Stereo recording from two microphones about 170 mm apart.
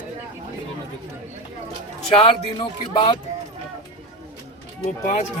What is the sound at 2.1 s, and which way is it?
Speech, 30° left (ahead or behind).